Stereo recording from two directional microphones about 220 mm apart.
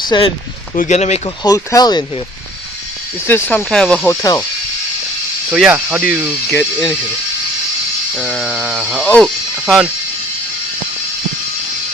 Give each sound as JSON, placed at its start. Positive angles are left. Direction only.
{"t": 0.0, "sound": "speech", "side_deg": 20}
{"t": 0.8, "sound": "speech", "side_deg": 30}
{"t": 1.5, "sound": "speech", "side_deg": 15}
{"t": 3.2, "sound": "speech", "side_deg": 10}
{"t": 3.6, "sound": "a sound", "side_deg": 5}
{"t": 5.5, "sound": "speech", "side_deg": -5}
{"t": 6.6, "sound": "a sound", "side_deg": 0}
{"t": 8.2, "sound": "a sound", "side_deg": 0}
{"t": 9.0, "sound": "speech", "side_deg": 5}